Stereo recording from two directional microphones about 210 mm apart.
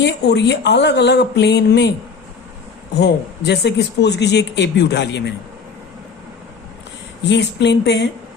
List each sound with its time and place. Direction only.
0.0 s speech: 55° left (ahead or behind)
3.0 s speech: 55° left (ahead or behind)
7.3 s speech: 55° left (ahead or behind)